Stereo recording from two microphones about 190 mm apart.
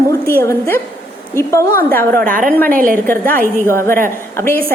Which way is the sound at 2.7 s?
45° right (ahead or behind).